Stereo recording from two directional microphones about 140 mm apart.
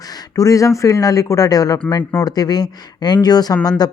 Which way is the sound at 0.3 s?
25° left (ahead or behind).